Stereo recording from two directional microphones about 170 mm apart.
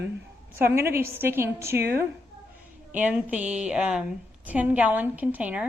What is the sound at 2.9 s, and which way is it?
A woman's voice, 10° right (ahead or behind).